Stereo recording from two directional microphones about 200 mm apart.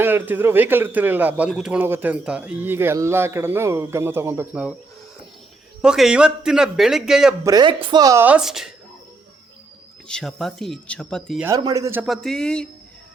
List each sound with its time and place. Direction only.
0.0 s a man's voice: 10° right (ahead or behind)
5.8 s a man's voice: 5° right (ahead or behind)
7.4 s a man's voice: 20° right (ahead or behind); by 8.7 s centre (ahead or behind)
10.1 s a man's voice: centre (ahead or behind)
11.4 s a man's voice: 15° right (ahead or behind)
12.0 s a man's voice: centre (ahead or behind)